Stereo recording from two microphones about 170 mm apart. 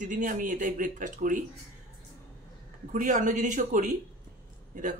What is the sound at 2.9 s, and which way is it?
Speech, 50° right (ahead or behind).